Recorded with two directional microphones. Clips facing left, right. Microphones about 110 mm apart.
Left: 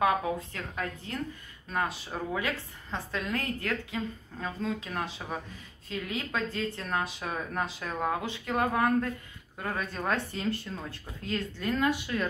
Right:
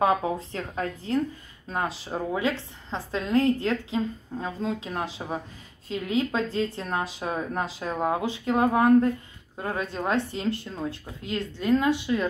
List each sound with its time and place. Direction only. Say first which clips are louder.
0.0 s a woman's voice: right 3 dB; 25° right (ahead or behind)